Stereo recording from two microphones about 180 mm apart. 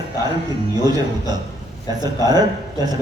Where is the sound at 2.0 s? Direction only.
20° right (ahead or behind).